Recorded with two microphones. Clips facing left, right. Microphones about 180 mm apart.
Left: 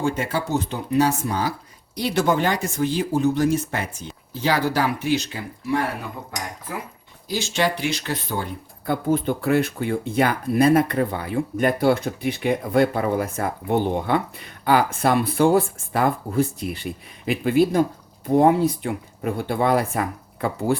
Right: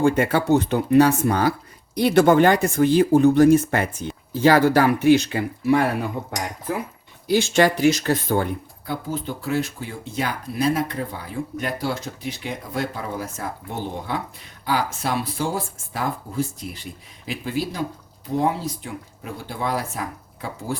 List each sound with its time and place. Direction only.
0.0 s speech: 60° right (ahead or behind)
7.3 s speech: 50° right (ahead or behind)
8.9 s speech: 55° left (ahead or behind)